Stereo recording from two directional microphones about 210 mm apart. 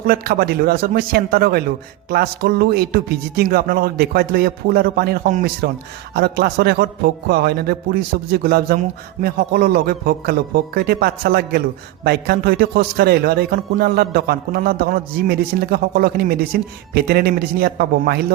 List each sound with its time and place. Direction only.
0.1 s a man's voice: 45° right (ahead or behind)